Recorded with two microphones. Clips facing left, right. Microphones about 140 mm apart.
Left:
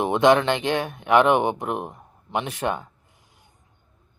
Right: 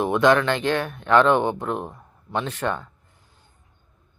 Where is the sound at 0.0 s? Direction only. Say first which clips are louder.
Left 1 dB; 20° left (ahead or behind).